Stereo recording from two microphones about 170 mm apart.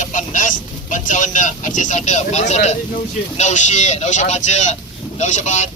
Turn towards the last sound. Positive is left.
turn(degrees=45)  # may be behind; listen again after turning